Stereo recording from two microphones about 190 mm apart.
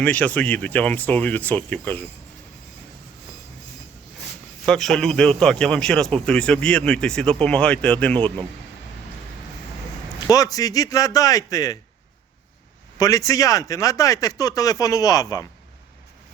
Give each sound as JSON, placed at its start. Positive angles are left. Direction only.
{"t": 0.0, "sound": "speech", "side_deg": 10}
{"t": 4.6, "sound": "speech", "side_deg": 5}
{"t": 10.2, "sound": "a man's voice", "side_deg": 20}
{"t": 13.0, "sound": "speech", "side_deg": 15}